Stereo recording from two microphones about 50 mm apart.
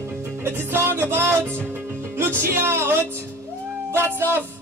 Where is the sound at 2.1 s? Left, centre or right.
Right.